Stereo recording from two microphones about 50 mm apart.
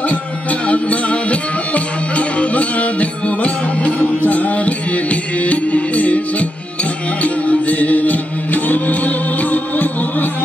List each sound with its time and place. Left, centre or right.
0.1 s music: left